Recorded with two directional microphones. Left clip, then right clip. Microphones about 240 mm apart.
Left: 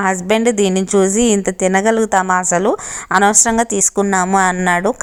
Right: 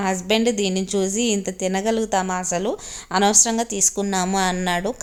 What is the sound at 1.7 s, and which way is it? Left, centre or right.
Speech, centre.